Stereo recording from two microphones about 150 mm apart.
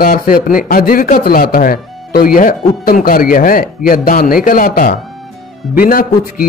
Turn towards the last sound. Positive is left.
turn(degrees=70)  # may be behind; listen again after turning